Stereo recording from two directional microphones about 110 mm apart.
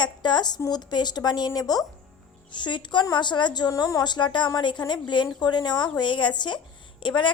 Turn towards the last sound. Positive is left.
turn(degrees=45)  # may be behind; listen again after turning